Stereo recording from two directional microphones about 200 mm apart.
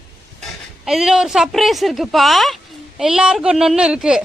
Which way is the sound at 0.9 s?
5° right (ahead or behind).